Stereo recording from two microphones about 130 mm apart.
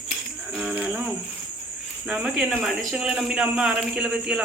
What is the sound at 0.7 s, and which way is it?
Cricket, 10° right (ahead or behind).